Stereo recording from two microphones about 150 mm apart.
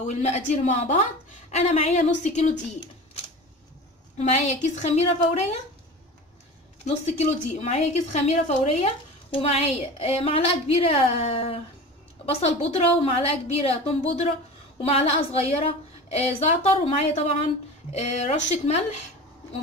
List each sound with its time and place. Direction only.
0.0 s a woman's voice: 50° left (ahead or behind)
4.2 s a woman's voice: 50° left (ahead or behind)
6.8 s a woman's voice: 50° left (ahead or behind)